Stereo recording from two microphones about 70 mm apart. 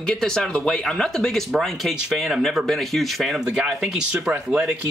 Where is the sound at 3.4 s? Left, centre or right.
Centre.